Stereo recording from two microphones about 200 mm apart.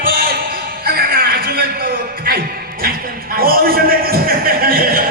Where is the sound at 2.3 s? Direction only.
45° right (ahead or behind).